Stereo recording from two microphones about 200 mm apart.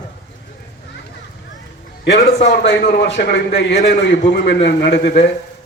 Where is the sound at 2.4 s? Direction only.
60° left (ahead or behind).